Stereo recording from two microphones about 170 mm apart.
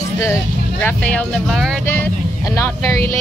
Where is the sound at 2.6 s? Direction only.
15° left (ahead or behind).